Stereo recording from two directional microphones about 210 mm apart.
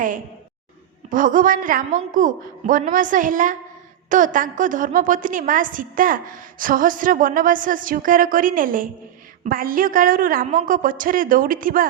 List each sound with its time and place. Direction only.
1.1 s a woman's voice: 40° right (ahead or behind)